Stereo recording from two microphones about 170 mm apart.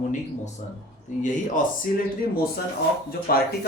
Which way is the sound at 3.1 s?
60° left (ahead or behind).